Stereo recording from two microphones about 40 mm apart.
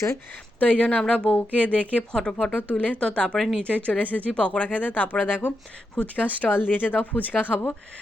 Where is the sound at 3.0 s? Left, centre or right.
Left.